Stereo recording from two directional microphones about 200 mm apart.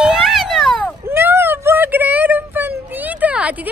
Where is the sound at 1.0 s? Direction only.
10° right (ahead or behind).